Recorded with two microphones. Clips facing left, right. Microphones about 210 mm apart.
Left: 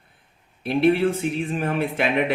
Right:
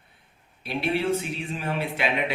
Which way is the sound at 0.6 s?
50° left (ahead or behind).